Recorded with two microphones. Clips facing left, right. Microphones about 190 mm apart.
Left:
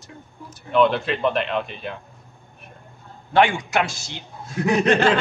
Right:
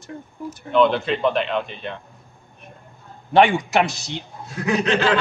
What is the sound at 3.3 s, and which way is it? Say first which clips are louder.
Speech: right 3 dB; 20° right (ahead or behind).